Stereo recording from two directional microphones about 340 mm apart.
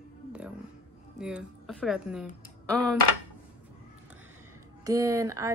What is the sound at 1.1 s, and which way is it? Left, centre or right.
A woman's voice, centre.